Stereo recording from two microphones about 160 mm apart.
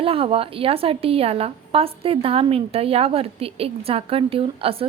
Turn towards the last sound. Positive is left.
turn(degrees=-35)  # may be behind; listen again after turning